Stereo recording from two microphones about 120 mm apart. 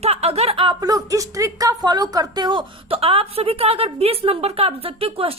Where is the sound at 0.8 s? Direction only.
30° right (ahead or behind).